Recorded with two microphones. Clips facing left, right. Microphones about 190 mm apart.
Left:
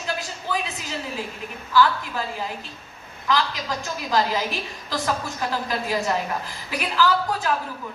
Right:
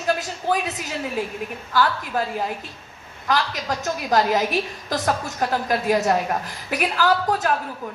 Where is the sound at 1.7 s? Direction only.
50° right (ahead or behind).